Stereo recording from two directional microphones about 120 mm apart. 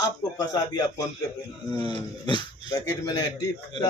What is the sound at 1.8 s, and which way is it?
Speech, 40° left (ahead or behind).